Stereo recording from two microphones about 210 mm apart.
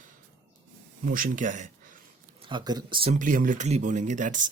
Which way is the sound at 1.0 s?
40° right (ahead or behind).